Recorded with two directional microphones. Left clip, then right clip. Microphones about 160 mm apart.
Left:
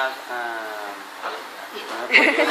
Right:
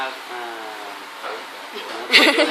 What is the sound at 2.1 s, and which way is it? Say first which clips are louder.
Speech: right 2 dB; 35° right (ahead or behind).